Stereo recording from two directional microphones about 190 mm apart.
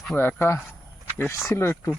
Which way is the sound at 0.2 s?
10° left (ahead or behind).